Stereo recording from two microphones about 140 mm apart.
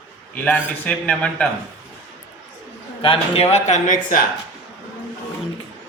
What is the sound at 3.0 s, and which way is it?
Speech, 40° left (ahead or behind).